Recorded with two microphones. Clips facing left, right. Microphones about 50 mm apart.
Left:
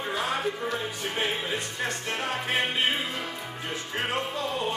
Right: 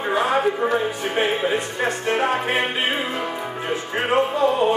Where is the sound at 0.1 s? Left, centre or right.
Right.